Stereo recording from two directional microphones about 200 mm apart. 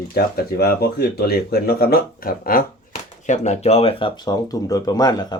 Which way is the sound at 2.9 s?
35° left (ahead or behind).